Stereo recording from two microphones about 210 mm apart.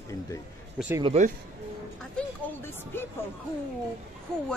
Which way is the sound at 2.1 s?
10° left (ahead or behind).